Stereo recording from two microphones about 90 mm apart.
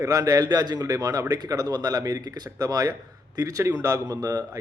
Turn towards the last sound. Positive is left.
turn(degrees=-45)  # may be behind; listen again after turning